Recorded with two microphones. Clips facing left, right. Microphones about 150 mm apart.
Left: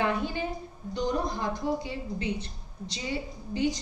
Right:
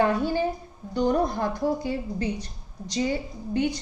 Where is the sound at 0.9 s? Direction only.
55° right (ahead or behind).